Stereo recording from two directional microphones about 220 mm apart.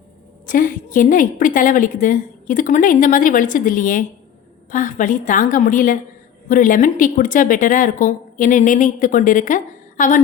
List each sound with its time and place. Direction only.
0.4 s a woman's voice: 40° left (ahead or behind)